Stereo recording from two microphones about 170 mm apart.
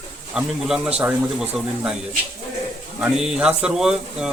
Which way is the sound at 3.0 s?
5° right (ahead or behind).